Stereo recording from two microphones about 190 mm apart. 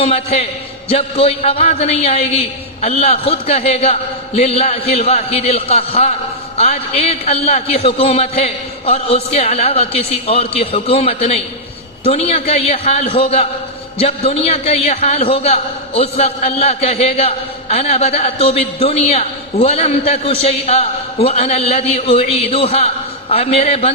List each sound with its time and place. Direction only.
0.0 s a man's voice: 30° left (ahead or behind)